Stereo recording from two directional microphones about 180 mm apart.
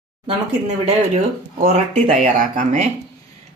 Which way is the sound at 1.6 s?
40° right (ahead or behind).